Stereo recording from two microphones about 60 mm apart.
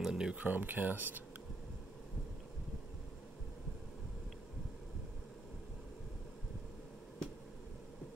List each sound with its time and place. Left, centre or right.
0.0 s speech: centre
0.4 s speech: right